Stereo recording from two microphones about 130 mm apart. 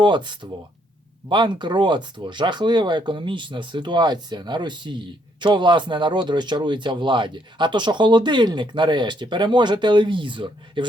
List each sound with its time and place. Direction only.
0.0 s speech: 35° right (ahead or behind)